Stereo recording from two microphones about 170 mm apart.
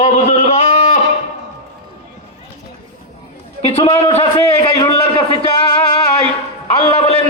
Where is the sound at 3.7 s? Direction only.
35° left (ahead or behind).